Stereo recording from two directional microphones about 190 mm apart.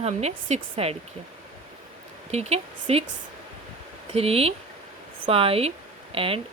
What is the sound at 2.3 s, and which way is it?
Speech, 35° right (ahead or behind).